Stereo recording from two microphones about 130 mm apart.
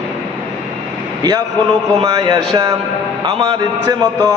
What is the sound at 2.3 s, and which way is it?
A man's voice, 30° right (ahead or behind).